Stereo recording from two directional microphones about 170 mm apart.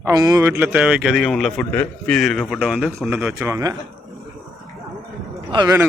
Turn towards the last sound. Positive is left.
turn(degrees=-25)  # may be behind; listen again after turning